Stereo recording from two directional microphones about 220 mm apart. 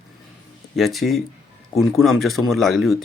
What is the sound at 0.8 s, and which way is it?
Speech, centre (ahead or behind).